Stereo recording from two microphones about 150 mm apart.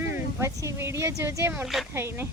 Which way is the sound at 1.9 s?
15° right (ahead or behind).